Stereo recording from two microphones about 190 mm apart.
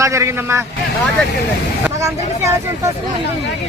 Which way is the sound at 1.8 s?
15° right (ahead or behind).